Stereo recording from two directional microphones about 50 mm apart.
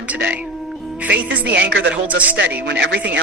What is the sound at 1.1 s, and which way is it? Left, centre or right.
Speech, right.